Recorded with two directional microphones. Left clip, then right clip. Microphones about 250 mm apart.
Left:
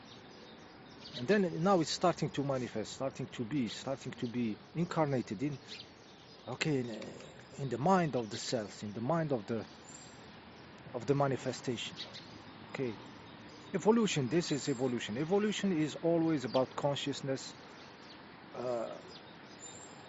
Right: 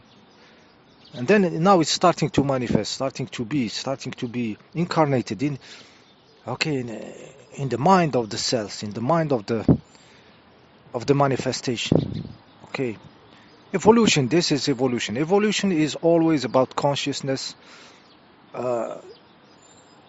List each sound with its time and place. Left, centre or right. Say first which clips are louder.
1.1 s speech: right 12 dB; right
10.9 s speech: right 12 dB; right
18.5 s speech: right 12 dB; right